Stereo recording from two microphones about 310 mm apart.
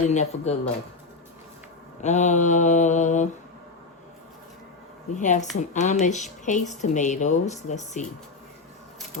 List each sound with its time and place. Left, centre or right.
0.1 s a woman's voice: left
2.0 s a woman's voice: left
5.1 s a woman's voice: left